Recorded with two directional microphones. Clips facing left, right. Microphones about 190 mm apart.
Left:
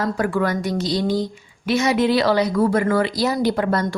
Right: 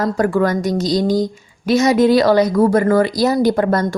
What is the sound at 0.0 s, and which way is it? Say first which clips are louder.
A woman's voice: right 5 dB; 45° right (ahead or behind).